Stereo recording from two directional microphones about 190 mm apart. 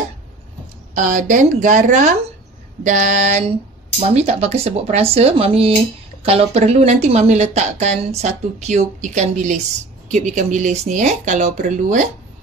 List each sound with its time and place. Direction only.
0.9 s speech: 40° right (ahead or behind)